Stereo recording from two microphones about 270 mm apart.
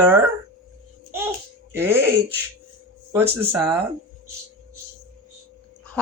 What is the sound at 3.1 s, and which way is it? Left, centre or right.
Speech, centre.